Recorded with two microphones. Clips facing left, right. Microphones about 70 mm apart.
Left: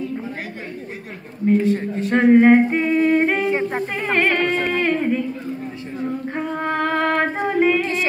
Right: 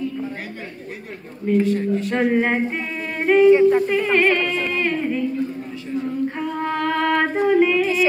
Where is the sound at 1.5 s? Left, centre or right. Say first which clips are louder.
Even; left.